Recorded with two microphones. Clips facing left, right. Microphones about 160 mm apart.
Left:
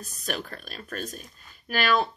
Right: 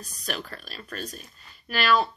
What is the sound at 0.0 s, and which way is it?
Speech, 45° left (ahead or behind).